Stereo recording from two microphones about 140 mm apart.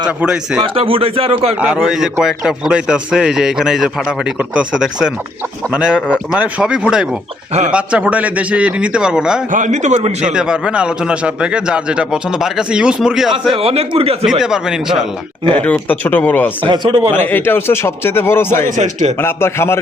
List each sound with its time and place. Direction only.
0.2 s a man's voice: 5° right (ahead or behind)
0.8 s a man's voice: 40° right (ahead or behind)
1.6 s a man's voice: 5° right (ahead or behind)
9.5 s a man's voice: 65° right (ahead or behind)
10.2 s a man's voice: 5° right (ahead or behind)
13.5 s a man's voice: 45° right (ahead or behind)
14.3 s a man's voice: 5° right (ahead or behind)
15.4 s a man's voice: 10° left (ahead or behind)
16.6 s a man's voice: 35° right (ahead or behind)
17.1 s a man's voice: 15° left (ahead or behind)
18.8 s a man's voice: 60° right (ahead or behind)
19.2 s a man's voice: 15° left (ahead or behind)